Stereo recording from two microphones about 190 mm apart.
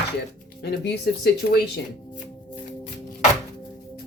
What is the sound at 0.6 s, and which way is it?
Speech, 60° left (ahead or behind).